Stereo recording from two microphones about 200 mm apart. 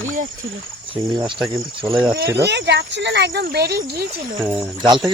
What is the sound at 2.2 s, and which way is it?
Speech, 55° right (ahead or behind).